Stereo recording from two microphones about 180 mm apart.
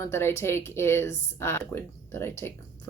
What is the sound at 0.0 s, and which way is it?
A woman's voice, 15° left (ahead or behind).